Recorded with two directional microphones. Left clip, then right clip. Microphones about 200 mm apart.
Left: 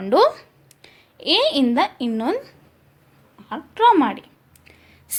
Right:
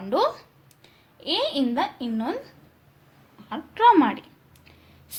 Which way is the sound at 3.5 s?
20° left (ahead or behind).